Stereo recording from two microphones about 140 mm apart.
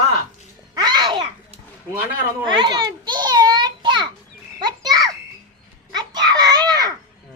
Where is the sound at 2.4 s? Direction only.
35° right (ahead or behind).